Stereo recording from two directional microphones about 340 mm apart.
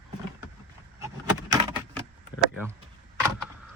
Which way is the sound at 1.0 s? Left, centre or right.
Centre.